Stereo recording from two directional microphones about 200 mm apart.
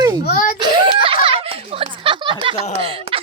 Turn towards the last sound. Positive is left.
turn(degrees=-30)  # may be behind; listen again after turning